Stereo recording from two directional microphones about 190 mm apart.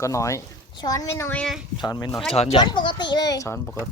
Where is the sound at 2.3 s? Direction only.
35° left (ahead or behind); by 3.6 s 15° left (ahead or behind).